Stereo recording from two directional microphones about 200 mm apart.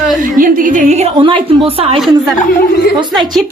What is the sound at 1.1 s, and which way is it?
Speech, 25° right (ahead or behind).